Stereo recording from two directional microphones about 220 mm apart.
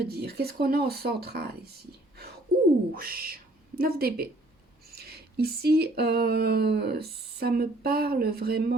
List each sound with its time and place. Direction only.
0.0 s speech: 45° right (ahead or behind)
2.9 s speech: 45° right (ahead or behind)